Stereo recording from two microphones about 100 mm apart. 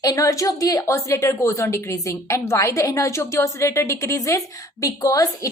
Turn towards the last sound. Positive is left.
turn(degrees=35)  # may be behind; listen again after turning